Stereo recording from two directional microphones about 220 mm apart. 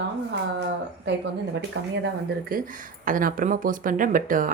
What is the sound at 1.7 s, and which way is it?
Speech, 55° right (ahead or behind).